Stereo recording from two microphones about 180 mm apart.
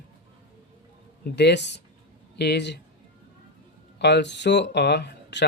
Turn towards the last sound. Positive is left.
turn(degrees=70)  # may be behind; listen again after turning